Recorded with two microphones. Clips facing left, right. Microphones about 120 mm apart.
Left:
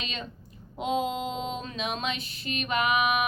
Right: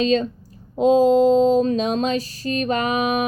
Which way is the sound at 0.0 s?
40° right (ahead or behind).